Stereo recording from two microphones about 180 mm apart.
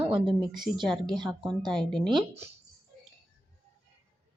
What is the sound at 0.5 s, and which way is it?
Speech, centre (ahead or behind).